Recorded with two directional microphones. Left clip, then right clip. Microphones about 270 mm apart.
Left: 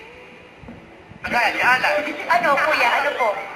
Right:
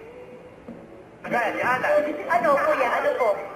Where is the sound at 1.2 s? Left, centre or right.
Centre.